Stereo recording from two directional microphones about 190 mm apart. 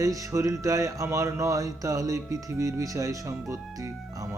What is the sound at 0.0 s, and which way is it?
Speech, 15° right (ahead or behind).